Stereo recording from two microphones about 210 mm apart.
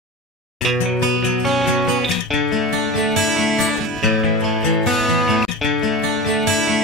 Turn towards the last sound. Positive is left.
turn(degrees=0)  # may be behind; listen again after turning